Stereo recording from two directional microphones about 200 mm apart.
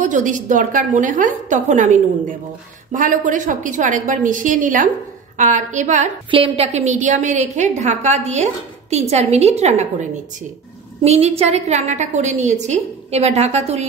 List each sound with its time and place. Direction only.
0.0 s a woman's voice: 40° right (ahead or behind)
11.1 s a woman's voice: 30° right (ahead or behind)